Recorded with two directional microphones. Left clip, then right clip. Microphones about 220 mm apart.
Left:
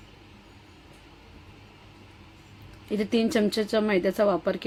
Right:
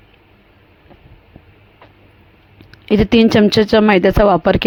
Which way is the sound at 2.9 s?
40° right (ahead or behind).